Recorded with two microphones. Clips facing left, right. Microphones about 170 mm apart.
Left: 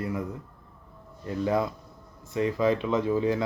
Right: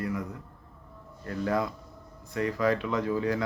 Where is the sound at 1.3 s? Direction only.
20° left (ahead or behind).